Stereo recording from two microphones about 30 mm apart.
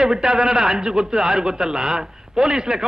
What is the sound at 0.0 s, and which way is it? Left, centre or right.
A man's voice, right.